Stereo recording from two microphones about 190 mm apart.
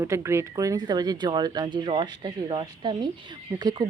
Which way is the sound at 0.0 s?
15° right (ahead or behind).